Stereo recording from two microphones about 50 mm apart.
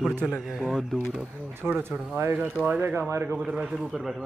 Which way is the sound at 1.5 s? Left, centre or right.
Right.